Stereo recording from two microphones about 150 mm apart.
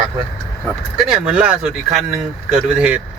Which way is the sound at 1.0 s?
5° right (ahead or behind).